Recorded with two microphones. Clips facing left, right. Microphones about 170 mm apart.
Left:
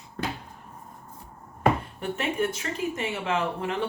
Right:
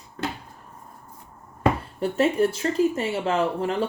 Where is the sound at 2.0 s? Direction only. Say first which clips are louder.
Right 7 dB; 35° right (ahead or behind).